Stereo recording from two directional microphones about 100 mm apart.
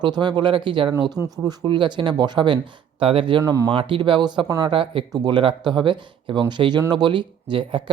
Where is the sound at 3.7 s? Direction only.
60° right (ahead or behind).